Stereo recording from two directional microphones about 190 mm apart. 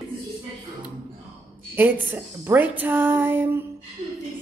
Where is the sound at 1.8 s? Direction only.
10° right (ahead or behind).